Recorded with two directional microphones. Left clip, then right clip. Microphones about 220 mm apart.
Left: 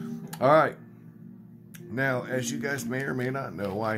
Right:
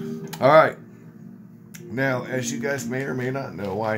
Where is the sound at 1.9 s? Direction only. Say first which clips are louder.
Right 3 dB; 20° left (ahead or behind).